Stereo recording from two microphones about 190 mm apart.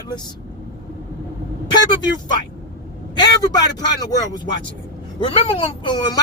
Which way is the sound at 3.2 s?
20° left (ahead or behind).